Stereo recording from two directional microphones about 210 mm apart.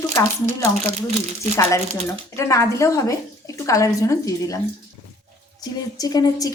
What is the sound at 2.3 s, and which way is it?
A woman's voice, 15° left (ahead or behind).